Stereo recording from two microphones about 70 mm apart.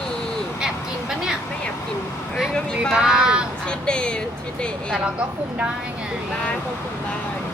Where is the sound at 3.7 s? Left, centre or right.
Centre.